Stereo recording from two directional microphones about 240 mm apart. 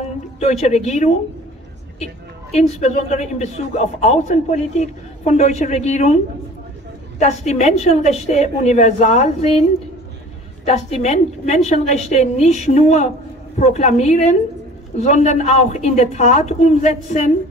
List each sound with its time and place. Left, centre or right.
0.4 s a woman's voice: left
2.5 s a woman's voice: left
7.2 s a woman's voice: left
10.6 s a woman's voice: left